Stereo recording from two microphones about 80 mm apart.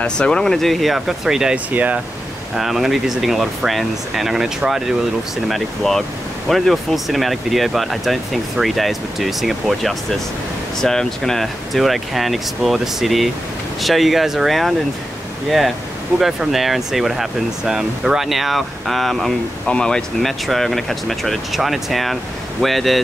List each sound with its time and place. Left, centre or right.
0.0 s speech: centre
1.7 s speech: centre
2.5 s speech: centre
16.2 s speech: centre